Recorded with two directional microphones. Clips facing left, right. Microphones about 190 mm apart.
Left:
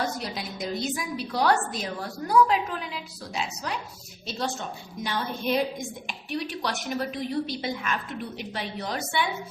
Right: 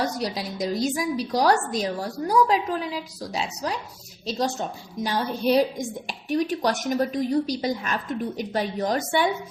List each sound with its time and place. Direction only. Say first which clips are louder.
0.0 s a woman's voice: right 4 dB; 35° right (ahead or behind)
5.0 s a woman's voice: right 5 dB; 40° right (ahead or behind)